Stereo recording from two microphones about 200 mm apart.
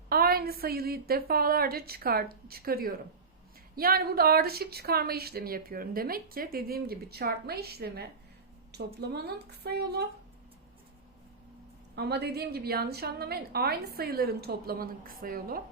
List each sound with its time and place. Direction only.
0.1 s a woman's voice: 50° right (ahead or behind)
11.9 s a woman's voice: 55° right (ahead or behind)